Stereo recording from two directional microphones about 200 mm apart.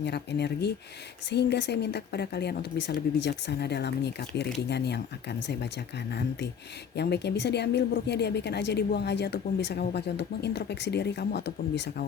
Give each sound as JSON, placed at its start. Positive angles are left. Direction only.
{"t": 0.0, "sound": "speech", "side_deg": 55}
{"t": 5.5, "sound": "speech", "side_deg": 55}